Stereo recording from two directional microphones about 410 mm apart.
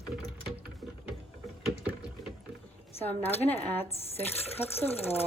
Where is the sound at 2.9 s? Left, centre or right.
Centre.